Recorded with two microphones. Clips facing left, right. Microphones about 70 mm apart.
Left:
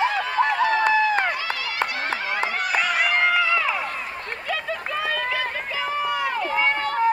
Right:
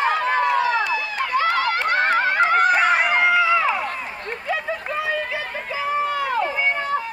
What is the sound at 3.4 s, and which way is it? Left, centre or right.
Run, centre.